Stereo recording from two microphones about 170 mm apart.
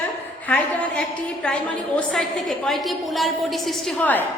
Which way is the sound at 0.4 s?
10° left (ahead or behind).